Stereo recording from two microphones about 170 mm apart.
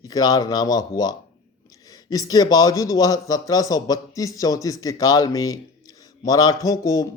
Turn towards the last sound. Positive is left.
turn(degrees=20)  # may be behind; listen again after turning